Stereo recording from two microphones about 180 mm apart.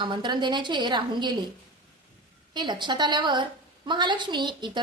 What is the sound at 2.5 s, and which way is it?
A woman's voice, 25° right (ahead or behind).